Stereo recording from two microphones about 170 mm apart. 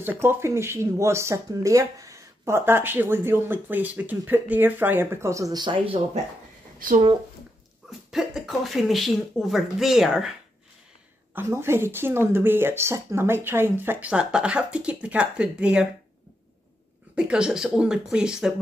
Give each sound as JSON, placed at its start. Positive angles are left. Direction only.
{"t": 0.0, "sound": "speech", "side_deg": -10}
{"t": 6.8, "sound": "speech", "side_deg": -50}
{"t": 8.1, "sound": "speech", "side_deg": 0}
{"t": 11.3, "sound": "speech", "side_deg": -15}
{"t": 17.1, "sound": "speech", "side_deg": -5}